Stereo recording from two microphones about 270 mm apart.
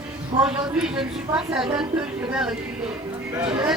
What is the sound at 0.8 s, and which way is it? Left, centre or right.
Speech, centre.